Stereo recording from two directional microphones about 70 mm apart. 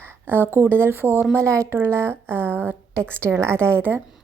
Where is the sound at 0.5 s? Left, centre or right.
Right.